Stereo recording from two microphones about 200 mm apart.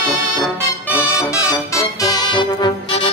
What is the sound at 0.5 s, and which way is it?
Music, 10° right (ahead or behind).